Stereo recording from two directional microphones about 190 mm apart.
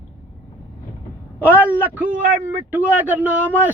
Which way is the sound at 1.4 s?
10° right (ahead or behind).